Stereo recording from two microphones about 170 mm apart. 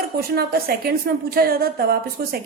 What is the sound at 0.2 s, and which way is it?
A woman's voice, 65° right (ahead or behind).